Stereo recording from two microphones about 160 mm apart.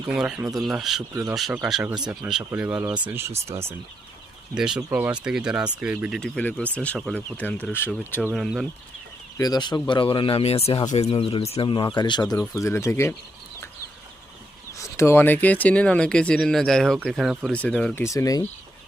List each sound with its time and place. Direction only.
0.1 s speech: 5° right (ahead or behind)
4.5 s speech: 5° right (ahead or behind)
6.1 s speech: 5° left (ahead or behind)
8.3 s speech: centre (ahead or behind)
9.4 s speech: 25° left (ahead or behind)
14.8 s speech: 15° left (ahead or behind)